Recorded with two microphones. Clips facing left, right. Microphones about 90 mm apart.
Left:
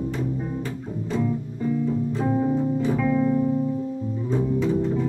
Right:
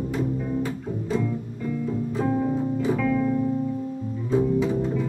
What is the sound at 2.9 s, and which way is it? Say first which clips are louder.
Music: even; 15° left (ahead or behind).